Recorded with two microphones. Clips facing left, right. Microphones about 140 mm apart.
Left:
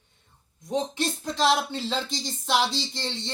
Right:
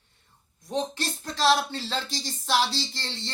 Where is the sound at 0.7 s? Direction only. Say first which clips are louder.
Left 2 dB; 15° left (ahead or behind).